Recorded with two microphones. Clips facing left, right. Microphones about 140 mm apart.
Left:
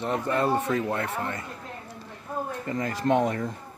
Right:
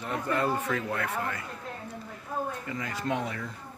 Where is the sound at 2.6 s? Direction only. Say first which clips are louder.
Left 7 dB; 45° left (ahead or behind).